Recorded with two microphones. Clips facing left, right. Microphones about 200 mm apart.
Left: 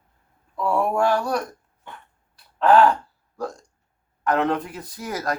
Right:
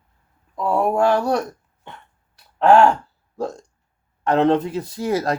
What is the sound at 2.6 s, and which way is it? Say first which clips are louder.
Speech: right 2 dB; 25° right (ahead or behind).